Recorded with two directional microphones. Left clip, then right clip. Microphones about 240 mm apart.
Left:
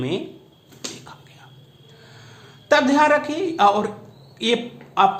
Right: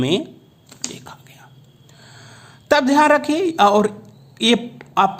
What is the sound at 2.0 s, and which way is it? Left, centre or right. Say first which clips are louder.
A man's voice: right 3 dB; right.